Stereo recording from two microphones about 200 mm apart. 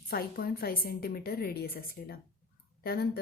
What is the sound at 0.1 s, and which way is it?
A woman's voice, 50° left (ahead or behind).